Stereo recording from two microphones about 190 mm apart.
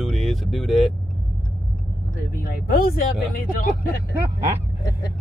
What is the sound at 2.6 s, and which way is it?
Speech, 50° left (ahead or behind).